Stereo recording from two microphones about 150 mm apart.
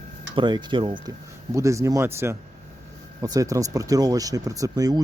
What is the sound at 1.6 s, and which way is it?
Speech, 20° right (ahead or behind).